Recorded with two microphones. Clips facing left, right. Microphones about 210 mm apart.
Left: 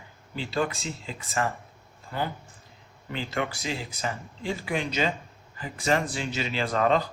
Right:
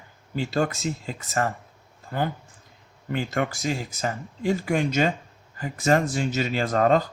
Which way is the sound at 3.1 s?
45° right (ahead or behind).